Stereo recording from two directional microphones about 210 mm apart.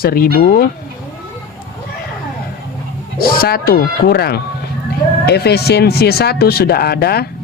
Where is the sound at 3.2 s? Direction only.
45° left (ahead or behind).